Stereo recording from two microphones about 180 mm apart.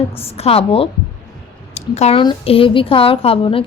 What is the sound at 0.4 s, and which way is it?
Speech, 30° left (ahead or behind).